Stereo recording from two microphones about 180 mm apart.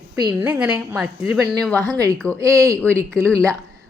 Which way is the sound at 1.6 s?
5° left (ahead or behind).